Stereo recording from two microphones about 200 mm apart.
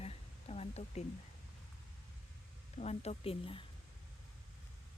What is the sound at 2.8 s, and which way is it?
Speech, 30° left (ahead or behind).